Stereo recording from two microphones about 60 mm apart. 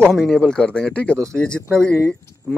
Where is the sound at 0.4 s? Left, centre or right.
Centre.